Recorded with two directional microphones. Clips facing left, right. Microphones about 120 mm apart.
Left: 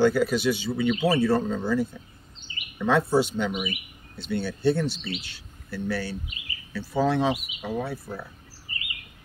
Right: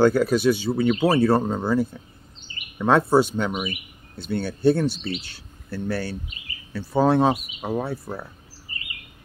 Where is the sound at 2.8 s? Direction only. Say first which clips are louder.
Right 4 dB; 50° right (ahead or behind).